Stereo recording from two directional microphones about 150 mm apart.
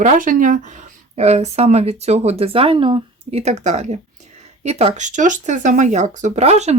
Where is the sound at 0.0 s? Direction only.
60° right (ahead or behind).